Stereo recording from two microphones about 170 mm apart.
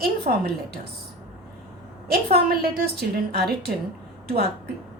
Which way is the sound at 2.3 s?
70° right (ahead or behind).